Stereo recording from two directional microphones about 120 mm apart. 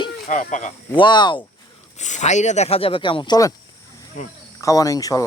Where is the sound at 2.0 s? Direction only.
85° left; by 3.2 s 45° left (ahead or behind).